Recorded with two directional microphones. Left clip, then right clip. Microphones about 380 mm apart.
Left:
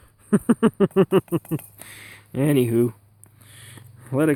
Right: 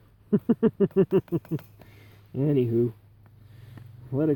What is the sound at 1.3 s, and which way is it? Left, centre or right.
Speech, centre.